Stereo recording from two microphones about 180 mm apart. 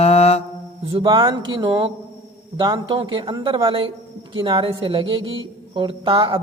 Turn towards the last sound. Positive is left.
turn(degrees=-30)  # may be behind; listen again after turning